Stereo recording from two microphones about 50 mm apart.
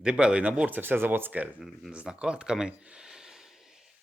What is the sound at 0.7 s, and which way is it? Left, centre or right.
Speech, right.